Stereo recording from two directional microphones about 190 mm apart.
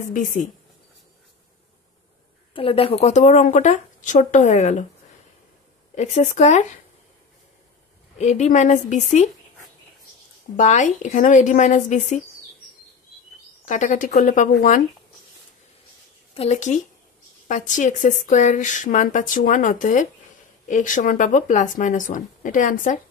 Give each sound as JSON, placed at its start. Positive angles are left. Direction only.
{"t": 0.0, "sound": "speech", "side_deg": 45}
{"t": 2.5, "sound": "speech", "side_deg": 30}
{"t": 5.9, "sound": "speech", "side_deg": 40}
{"t": 8.2, "sound": "speech", "side_deg": 35}
{"t": 10.5, "sound": "speech", "side_deg": 40}
{"t": 13.7, "sound": "speech", "side_deg": 40}
{"t": 16.3, "sound": "speech", "side_deg": 35}